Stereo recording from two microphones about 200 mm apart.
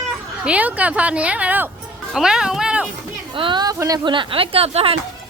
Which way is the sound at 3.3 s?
25° right (ahead or behind).